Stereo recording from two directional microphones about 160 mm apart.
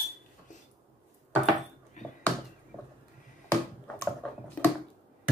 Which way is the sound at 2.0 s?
50° left (ahead or behind).